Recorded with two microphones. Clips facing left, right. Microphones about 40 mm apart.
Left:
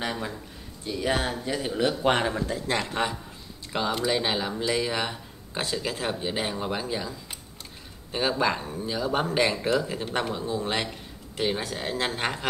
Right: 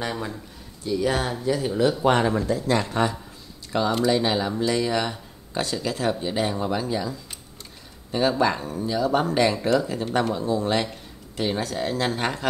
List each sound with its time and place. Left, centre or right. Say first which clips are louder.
0.0 s speech: right 2 dB; centre
2.2 s speech: right 5 dB; centre